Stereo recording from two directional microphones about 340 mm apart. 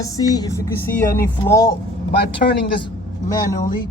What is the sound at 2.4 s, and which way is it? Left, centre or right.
Speech, left.